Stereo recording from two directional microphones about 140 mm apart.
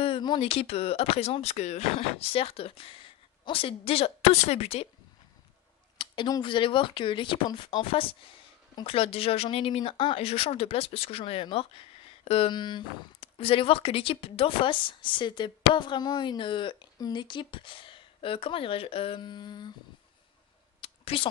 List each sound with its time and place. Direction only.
0.0 s speech: 35° left (ahead or behind)
5.9 s speech: 30° left (ahead or behind)
20.8 s a sound: 40° left (ahead or behind)